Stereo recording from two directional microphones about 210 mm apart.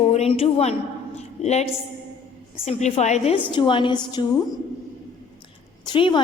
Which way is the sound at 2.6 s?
30° left (ahead or behind).